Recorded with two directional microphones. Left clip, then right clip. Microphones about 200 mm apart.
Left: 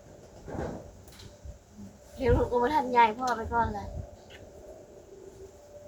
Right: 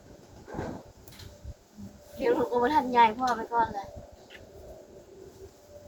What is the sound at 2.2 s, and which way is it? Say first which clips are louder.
A woman's voice: even; 10° left (ahead or behind).